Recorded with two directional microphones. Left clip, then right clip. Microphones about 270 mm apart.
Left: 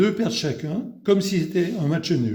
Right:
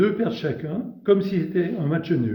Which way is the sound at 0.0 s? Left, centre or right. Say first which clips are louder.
Even; left.